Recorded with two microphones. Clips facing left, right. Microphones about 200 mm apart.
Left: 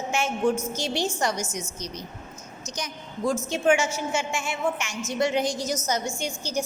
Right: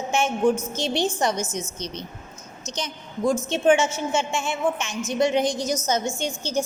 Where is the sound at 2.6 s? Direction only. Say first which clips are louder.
Right 3 dB; 25° right (ahead or behind).